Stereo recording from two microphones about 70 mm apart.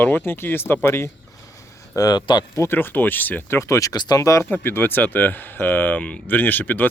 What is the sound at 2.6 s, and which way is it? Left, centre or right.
Speech, left.